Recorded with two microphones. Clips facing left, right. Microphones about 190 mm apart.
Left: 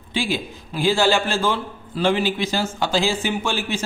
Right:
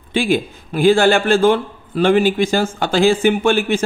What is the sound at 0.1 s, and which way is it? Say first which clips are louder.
A man's voice: right 7 dB; 55° right (ahead or behind).